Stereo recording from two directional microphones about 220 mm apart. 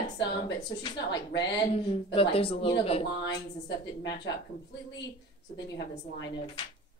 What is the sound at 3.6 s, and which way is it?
Speech, 50° left (ahead or behind).